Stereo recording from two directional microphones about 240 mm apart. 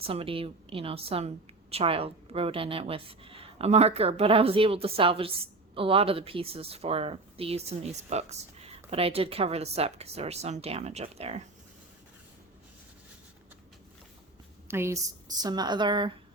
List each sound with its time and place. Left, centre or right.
0.0 s speech: right
14.7 s a woman's voice: centre